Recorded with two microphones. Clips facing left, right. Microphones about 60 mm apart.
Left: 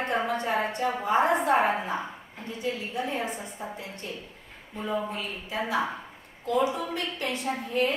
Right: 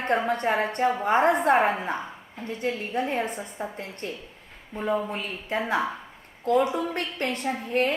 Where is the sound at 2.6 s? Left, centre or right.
Right.